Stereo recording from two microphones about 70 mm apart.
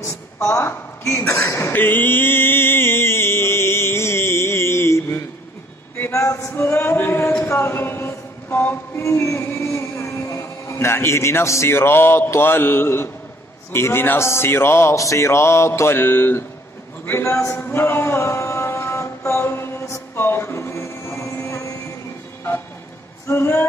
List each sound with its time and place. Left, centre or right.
0.4 s a woman's voice: left
1.7 s mantra: left
6.1 s male singing: left
6.5 s music: left
7.4 s a sound: left
13.7 s a man's voice: left
18.2 s mantra: left
23.2 s a man's voice: left